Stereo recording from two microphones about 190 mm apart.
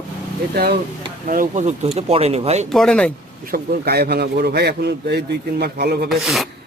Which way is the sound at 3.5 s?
55° right (ahead or behind).